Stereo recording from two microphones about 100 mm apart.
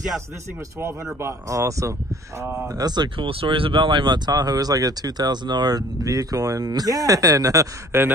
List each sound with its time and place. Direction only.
1.2 s speech: 30° right (ahead or behind)
2.7 s speech: 45° right (ahead or behind)
3.3 s a man's voice: 65° right (ahead or behind); by 8.1 s 25° right (ahead or behind)